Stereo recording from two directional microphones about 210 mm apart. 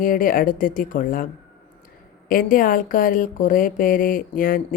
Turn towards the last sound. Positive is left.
turn(degrees=40)  # may be behind; listen again after turning